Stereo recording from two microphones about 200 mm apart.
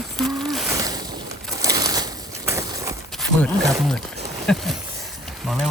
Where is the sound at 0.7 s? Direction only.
15° right (ahead or behind).